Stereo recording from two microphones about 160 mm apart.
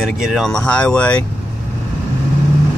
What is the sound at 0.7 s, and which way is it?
Speech, 10° left (ahead or behind).